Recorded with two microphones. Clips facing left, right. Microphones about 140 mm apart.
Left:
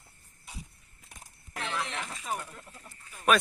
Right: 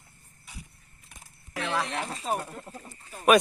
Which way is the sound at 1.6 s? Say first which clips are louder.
Right 5 dB; 80° right.